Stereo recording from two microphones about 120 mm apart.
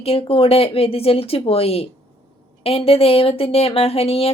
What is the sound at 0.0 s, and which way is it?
A woman's voice, 55° left (ahead or behind).